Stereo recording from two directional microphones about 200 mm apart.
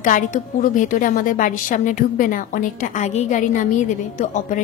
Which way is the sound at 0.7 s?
40° left (ahead or behind).